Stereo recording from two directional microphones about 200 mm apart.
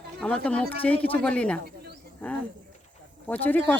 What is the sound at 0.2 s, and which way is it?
Speech, 5° left (ahead or behind).